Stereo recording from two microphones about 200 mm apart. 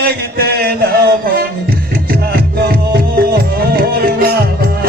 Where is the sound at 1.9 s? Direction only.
50° right (ahead or behind).